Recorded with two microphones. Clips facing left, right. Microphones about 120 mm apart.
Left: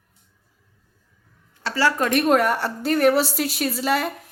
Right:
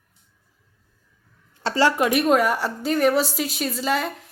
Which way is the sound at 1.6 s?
25° right (ahead or behind).